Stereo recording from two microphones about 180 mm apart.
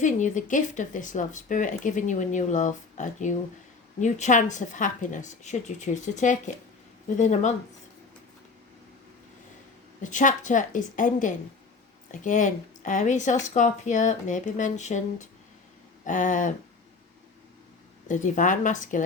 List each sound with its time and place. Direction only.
0.0 s speech: 45° left (ahead or behind)
10.0 s speech: 45° left (ahead or behind)
18.1 s speech: 45° left (ahead or behind)